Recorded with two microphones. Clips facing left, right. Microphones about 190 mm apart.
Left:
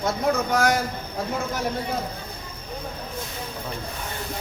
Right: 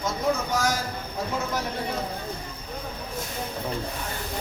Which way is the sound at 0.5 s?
60° left (ahead or behind).